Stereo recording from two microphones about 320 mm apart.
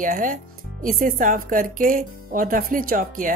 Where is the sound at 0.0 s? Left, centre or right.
Right.